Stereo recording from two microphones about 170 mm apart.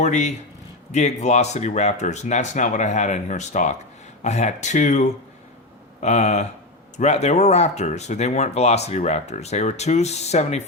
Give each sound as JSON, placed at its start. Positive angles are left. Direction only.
{"t": 0.0, "sound": "speech", "side_deg": 45}